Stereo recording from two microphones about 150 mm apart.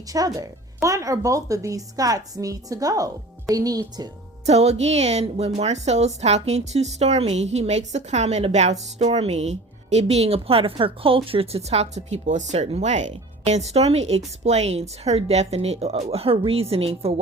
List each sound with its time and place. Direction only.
0.1 s a woman's voice: 25° right (ahead or behind)
4.4 s speech: 45° right (ahead or behind)